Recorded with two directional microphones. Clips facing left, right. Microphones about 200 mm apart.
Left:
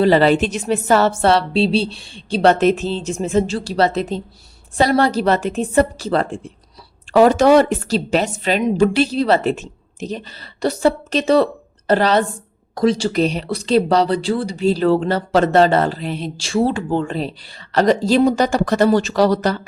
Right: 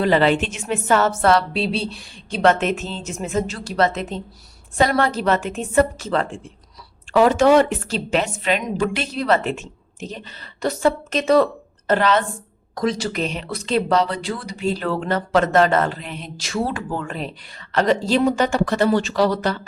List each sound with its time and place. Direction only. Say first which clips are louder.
0.0 s speech: left 4 dB; 35° left (ahead or behind)